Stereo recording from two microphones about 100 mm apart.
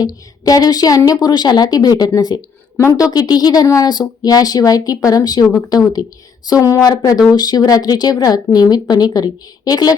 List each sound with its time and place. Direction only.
0.0 s a woman's voice: 40° left (ahead or behind)
2.7 s speech: 25° left (ahead or behind)
3.1 s a woman's voice: 40° left (ahead or behind)